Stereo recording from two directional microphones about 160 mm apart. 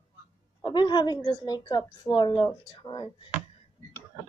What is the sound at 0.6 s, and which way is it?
Speech, 30° left (ahead or behind).